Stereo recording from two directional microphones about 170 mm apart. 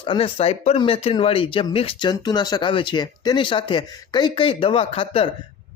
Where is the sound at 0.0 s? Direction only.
30° left (ahead or behind).